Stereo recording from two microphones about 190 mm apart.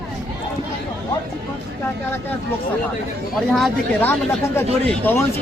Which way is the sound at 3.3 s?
Centre (ahead or behind).